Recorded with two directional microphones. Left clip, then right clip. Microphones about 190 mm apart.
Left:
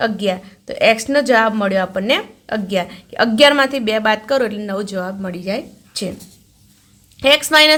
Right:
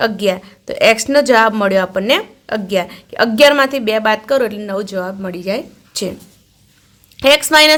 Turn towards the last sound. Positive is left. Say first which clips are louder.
# right 2 dB
turn(degrees=-15)  # may be behind; listen again after turning